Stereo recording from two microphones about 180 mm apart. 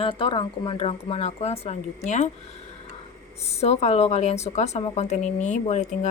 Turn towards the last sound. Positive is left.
turn(degrees=40)  # may be behind; listen again after turning